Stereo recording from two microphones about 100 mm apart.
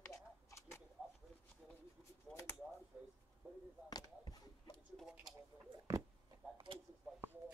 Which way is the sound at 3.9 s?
45° left (ahead or behind).